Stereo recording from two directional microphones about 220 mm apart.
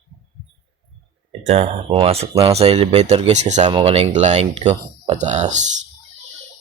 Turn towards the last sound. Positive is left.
turn(degrees=-35)  # may be behind; listen again after turning